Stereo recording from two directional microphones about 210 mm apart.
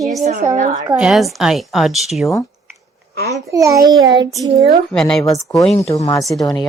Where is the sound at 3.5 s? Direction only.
15° right (ahead or behind).